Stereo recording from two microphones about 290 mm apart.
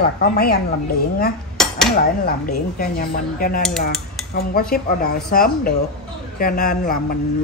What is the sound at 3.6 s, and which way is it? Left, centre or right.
Speech, centre.